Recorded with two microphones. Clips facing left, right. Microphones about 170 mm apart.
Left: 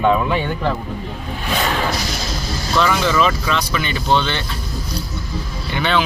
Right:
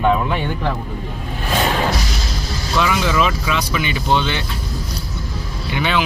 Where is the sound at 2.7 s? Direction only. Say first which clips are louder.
Left 1 dB; 10° right (ahead or behind).